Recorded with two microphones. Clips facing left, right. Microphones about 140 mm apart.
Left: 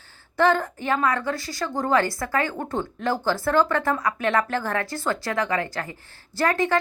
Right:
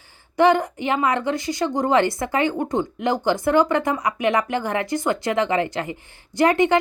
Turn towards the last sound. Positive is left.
turn(degrees=-20)  # may be behind; listen again after turning